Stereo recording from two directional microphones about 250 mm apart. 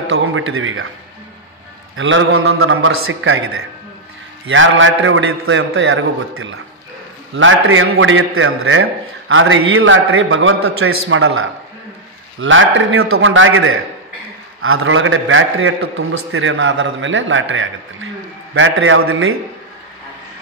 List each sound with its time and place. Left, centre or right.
0.1 s speech: right
2.0 s a man's voice: right